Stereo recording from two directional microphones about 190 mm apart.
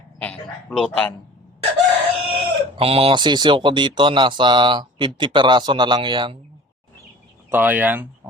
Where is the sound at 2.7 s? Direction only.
30° right (ahead or behind).